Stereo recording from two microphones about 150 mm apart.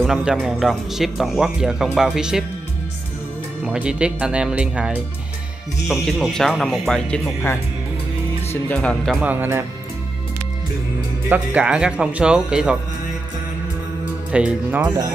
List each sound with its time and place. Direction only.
0.0 s speech: 5° right (ahead or behind)
3.6 s speech: 5° right (ahead or behind)
8.6 s speech: 10° left (ahead or behind)
9.2 s speech: 15° right (ahead or behind)
11.2 s speech: 10° right (ahead or behind)
14.3 s speech: 10° right (ahead or behind)